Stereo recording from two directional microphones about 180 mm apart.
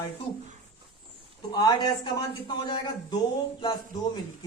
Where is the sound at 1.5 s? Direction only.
25° left (ahead or behind).